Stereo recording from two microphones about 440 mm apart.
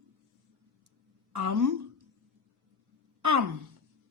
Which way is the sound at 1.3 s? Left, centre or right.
Right.